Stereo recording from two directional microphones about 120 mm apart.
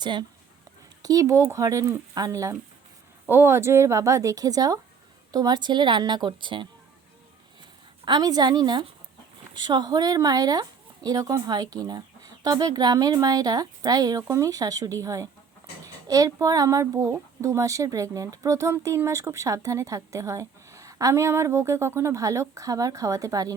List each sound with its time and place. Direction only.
0.0 s speech: 40° right (ahead or behind)
1.0 s speech: 30° right (ahead or behind)
8.0 s speech: 35° right (ahead or behind)